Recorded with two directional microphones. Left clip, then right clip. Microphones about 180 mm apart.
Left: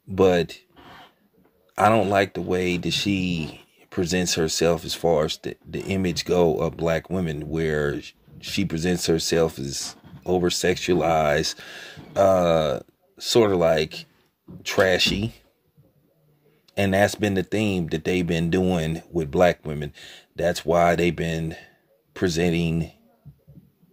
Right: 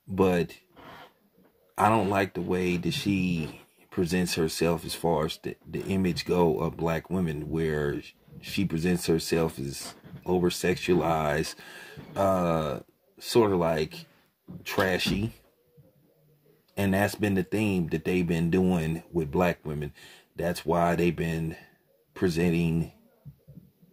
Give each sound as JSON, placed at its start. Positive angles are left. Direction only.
{"t": 0.1, "sound": "speech", "side_deg": 30}
{"t": 1.8, "sound": "speech", "side_deg": 30}
{"t": 16.7, "sound": "speech", "side_deg": 35}